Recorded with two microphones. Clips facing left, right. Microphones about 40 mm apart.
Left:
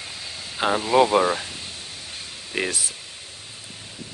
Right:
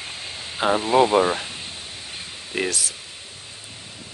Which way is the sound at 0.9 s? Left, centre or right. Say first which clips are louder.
Even; centre.